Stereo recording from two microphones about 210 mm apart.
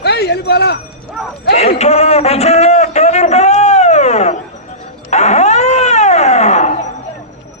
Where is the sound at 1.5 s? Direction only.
30° left (ahead or behind).